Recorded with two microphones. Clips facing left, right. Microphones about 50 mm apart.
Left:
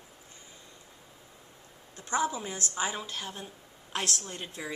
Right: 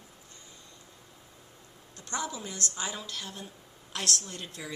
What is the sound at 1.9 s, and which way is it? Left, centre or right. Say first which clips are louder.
A woman's voice: left 6 dB; centre.